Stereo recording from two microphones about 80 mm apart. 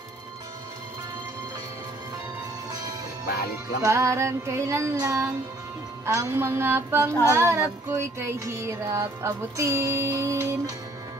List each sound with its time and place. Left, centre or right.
3.8 s music: right